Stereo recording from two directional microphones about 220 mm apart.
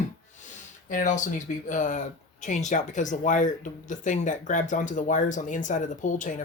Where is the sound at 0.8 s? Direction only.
35° left (ahead or behind).